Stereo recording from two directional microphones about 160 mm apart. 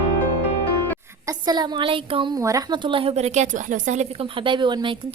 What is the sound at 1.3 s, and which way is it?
Speech, 25° right (ahead or behind).